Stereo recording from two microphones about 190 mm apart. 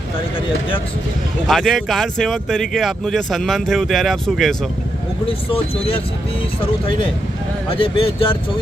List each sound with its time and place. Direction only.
1.5 s speech: centre (ahead or behind)
5.2 s speech: 30° left (ahead or behind)